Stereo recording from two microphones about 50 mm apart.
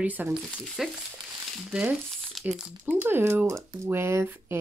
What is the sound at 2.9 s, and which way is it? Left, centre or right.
Speech, right.